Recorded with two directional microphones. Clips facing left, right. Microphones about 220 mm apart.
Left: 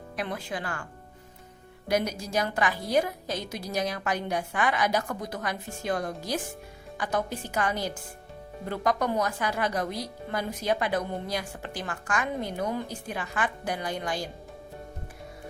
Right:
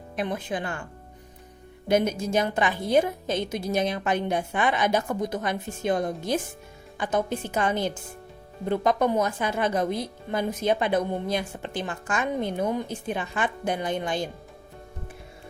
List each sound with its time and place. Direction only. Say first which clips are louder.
0.2 s speech: right 4 dB; 20° right (ahead or behind)
1.9 s speech: right 5 dB; 25° right (ahead or behind)